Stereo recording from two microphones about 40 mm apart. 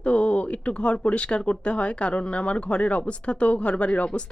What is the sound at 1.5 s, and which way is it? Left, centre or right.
A woman's voice, left.